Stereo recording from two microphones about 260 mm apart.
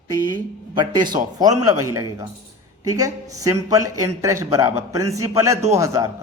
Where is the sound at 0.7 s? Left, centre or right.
Centre.